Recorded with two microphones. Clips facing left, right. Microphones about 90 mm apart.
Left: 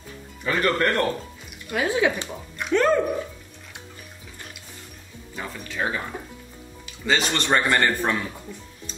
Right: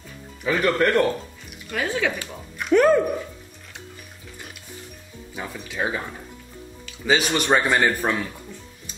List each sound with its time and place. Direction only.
0.4 s speech: 5° right (ahead or behind)
1.7 s speech: 15° left (ahead or behind)
2.7 s a man's voice: 10° right (ahead or behind)
5.3 s a man's voice: 10° right (ahead or behind)
7.1 s a man's voice: 10° right (ahead or behind)